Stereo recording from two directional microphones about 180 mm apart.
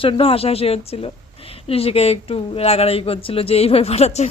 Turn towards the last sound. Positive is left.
turn(degrees=35)  # may be behind; listen again after turning